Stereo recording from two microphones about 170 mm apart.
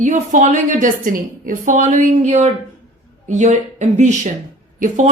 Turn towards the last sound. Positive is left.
turn(degrees=-50)  # may be behind; listen again after turning